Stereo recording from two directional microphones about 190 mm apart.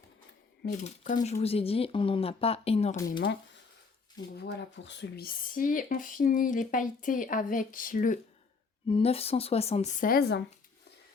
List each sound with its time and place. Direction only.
0.7 s speech: 40° left (ahead or behind)
3.1 s speech: 50° left (ahead or behind)
4.4 s speech: 70° left (ahead or behind); by 8.2 s 45° left (ahead or behind)
8.9 s speech: 30° left (ahead or behind); by 10.4 s 60° left (ahead or behind)